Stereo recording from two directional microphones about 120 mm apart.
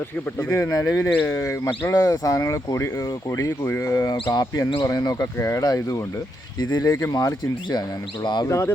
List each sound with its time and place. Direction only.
0.3 s speech: 20° left (ahead or behind); by 8.4 s 40° left (ahead or behind)
8.4 s speech: 25° left (ahead or behind)